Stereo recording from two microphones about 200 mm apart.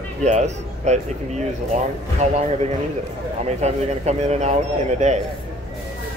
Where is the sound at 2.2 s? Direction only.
35° right (ahead or behind).